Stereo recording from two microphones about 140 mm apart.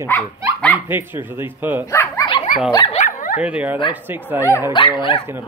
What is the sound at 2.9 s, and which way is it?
Dog, 65° left (ahead or behind).